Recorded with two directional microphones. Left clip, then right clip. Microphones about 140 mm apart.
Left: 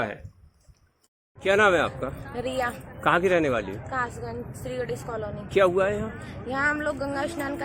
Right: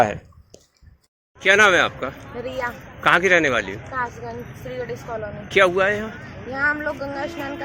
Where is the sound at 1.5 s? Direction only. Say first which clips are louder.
Right 6 dB; 5° left (ahead or behind).